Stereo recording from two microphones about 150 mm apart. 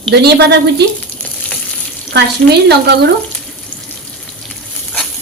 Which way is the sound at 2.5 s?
90° right.